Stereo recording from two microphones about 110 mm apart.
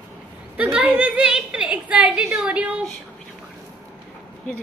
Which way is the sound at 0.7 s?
10° right (ahead or behind).